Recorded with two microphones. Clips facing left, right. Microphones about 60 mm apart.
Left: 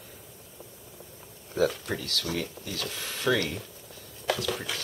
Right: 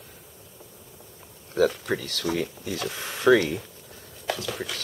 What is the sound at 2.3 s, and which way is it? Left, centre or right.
Speech, centre.